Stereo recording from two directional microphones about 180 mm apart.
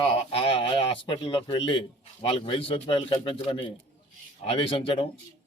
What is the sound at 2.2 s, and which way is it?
A man's voice, 30° left (ahead or behind).